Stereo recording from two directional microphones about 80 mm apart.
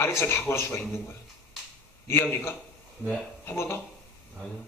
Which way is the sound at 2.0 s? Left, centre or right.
Left.